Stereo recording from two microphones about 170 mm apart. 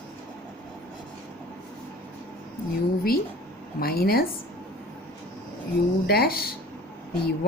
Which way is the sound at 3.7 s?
65° left (ahead or behind).